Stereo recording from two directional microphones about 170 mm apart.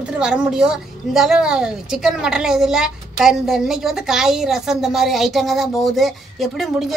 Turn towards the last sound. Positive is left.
turn(degrees=0)  # may be behind; listen again after turning